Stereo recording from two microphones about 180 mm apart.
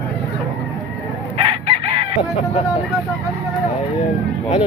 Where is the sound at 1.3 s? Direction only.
35° right (ahead or behind).